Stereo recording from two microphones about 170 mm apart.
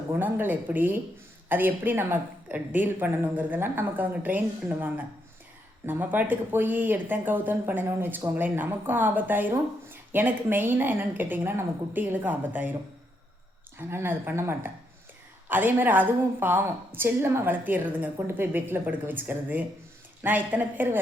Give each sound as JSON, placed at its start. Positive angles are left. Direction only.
{"t": 0.2, "sound": "speech", "side_deg": -10}
{"t": 13.7, "sound": "speech", "side_deg": -15}